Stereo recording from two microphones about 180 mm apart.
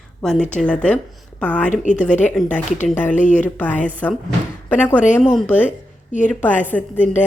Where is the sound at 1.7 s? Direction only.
45° left (ahead or behind).